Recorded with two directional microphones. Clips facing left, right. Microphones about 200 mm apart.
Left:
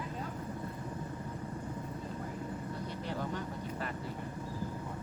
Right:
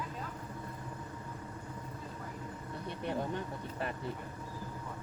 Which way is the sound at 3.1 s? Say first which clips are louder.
Right 3 dB; 25° right (ahead or behind).